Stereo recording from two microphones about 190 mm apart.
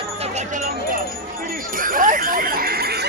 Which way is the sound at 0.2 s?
40° right (ahead or behind).